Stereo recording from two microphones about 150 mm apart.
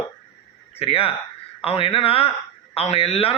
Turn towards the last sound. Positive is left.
turn(degrees=40)  # may be behind; listen again after turning